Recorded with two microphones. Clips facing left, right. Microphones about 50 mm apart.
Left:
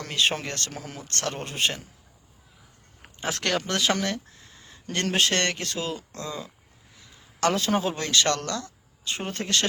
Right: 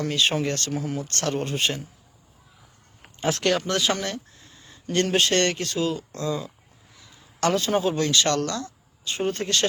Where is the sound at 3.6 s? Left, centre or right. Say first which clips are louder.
Right 2 dB; left.